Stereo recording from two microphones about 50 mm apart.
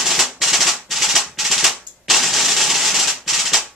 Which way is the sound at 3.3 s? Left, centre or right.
Centre.